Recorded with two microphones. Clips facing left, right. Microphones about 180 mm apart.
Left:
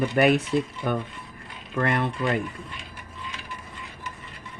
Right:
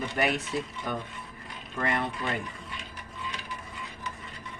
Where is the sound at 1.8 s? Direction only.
60° left (ahead or behind).